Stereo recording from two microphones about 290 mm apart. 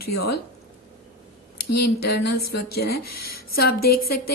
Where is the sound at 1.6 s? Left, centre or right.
Left.